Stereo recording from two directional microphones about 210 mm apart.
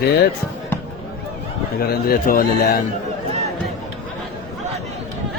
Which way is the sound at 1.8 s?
45° left (ahead or behind).